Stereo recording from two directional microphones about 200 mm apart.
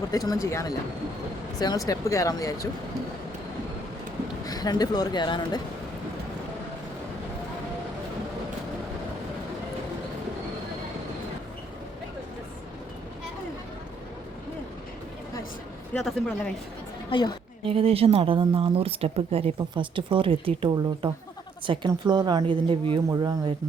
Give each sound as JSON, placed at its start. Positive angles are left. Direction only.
{"t": 0.1, "sound": "speech", "side_deg": 20}
{"t": 4.4, "sound": "speech", "side_deg": 20}
{"t": 16.0, "sound": "speech", "side_deg": 5}
{"t": 17.1, "sound": "speech", "side_deg": 25}
{"t": 17.7, "sound": "speech", "side_deg": -30}